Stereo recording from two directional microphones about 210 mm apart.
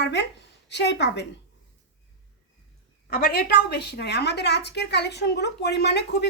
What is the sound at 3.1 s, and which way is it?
A woman's voice, 50° left (ahead or behind).